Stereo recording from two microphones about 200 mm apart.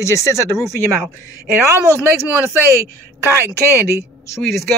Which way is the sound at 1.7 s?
10° right (ahead or behind).